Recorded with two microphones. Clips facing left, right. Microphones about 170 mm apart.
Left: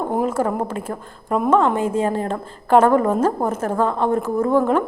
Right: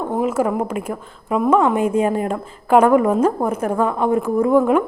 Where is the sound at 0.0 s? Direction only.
5° left (ahead or behind).